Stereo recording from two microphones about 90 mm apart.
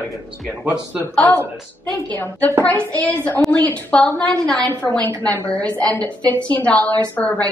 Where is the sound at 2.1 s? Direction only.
20° left (ahead or behind).